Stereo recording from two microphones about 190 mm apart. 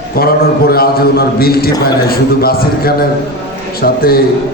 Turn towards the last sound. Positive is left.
turn(degrees=50)  # may be behind; listen again after turning